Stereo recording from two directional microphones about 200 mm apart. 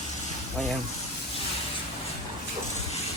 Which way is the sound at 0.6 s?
5° left (ahead or behind).